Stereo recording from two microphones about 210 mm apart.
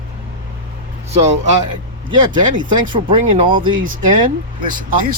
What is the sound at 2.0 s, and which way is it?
Speech, 20° right (ahead or behind).